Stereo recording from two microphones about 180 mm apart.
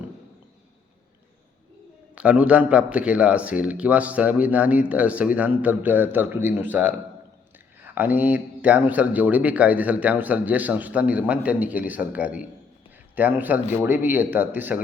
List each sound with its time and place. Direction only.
2.1 s speech: 5° right (ahead or behind)
7.9 s speech: 10° right (ahead or behind)